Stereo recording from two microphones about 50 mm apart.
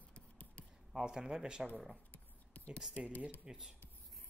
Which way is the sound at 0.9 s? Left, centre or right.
Centre.